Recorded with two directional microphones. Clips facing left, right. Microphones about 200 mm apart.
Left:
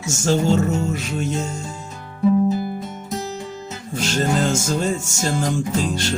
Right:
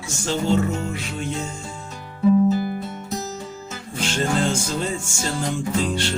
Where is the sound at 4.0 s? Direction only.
45° left (ahead or behind).